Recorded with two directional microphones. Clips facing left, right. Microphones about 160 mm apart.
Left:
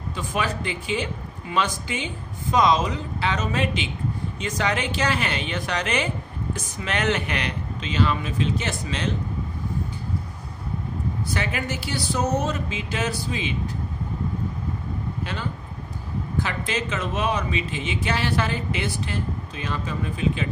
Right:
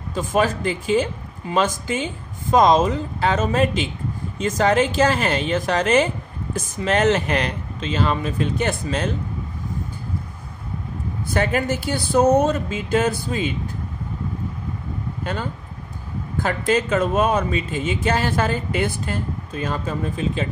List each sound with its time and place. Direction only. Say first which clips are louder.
0.1 s a man's voice: right 7 dB; 45° right (ahead or behind)
8.5 s speech: right 6 dB; 50° right (ahead or behind)
11.2 s speech: right 9 dB; 50° right (ahead or behind)
16.3 s speech: right 8 dB; 50° right (ahead or behind)